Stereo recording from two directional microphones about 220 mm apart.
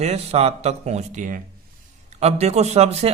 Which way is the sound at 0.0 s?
30° right (ahead or behind).